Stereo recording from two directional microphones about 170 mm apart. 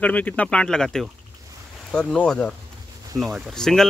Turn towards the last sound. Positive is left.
turn(degrees=5)  # may be behind; listen again after turning